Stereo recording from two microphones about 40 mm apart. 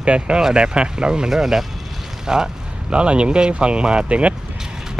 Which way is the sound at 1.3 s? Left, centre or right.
Centre.